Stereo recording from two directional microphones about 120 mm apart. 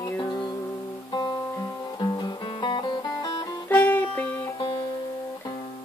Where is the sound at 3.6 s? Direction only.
15° left (ahead or behind).